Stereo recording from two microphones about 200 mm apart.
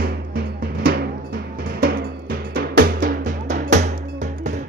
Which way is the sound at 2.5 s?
45° right (ahead or behind).